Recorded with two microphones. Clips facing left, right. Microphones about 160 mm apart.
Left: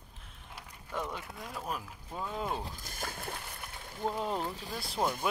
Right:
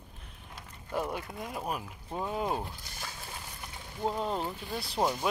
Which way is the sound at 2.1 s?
20° right (ahead or behind).